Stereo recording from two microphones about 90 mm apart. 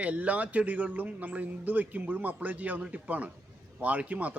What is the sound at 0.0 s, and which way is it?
A man's voice, 15° right (ahead or behind).